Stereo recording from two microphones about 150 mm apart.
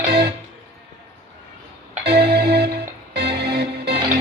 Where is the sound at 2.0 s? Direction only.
90° right.